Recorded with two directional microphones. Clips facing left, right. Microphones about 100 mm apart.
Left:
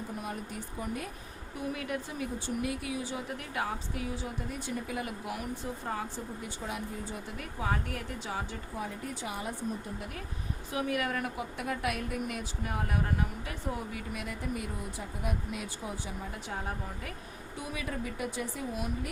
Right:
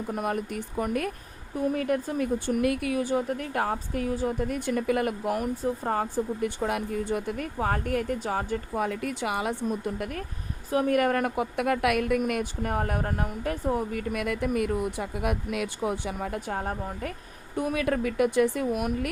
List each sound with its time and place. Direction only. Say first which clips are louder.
0.1 s a woman's voice: right 9 dB; 60° right (ahead or behind)
1.5 s speech: right 9 dB; 45° right (ahead or behind)
10.7 s a woman's voice: right 9 dB; 45° right (ahead or behind)
17.6 s a woman's voice: right 11 dB; 60° right (ahead or behind)